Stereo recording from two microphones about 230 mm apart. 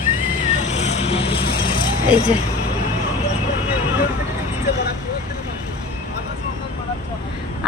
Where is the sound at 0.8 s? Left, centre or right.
Left.